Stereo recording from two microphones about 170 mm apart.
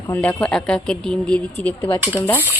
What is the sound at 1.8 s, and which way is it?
Speech, 25° left (ahead or behind).